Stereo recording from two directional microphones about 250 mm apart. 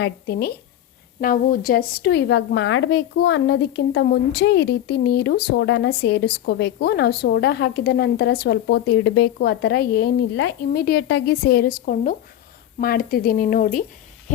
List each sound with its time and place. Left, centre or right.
0.0 s a woman's voice: left